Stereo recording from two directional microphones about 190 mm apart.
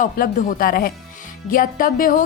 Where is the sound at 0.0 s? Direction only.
45° left (ahead or behind).